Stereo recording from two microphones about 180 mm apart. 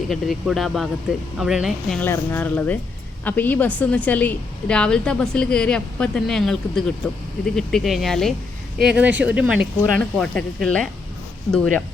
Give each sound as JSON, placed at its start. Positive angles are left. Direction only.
{"t": 0.1, "sound": "a woman's voice", "side_deg": 0}
{"t": 2.0, "sound": "a woman's voice", "side_deg": 10}
{"t": 10.0, "sound": "a woman's voice", "side_deg": 5}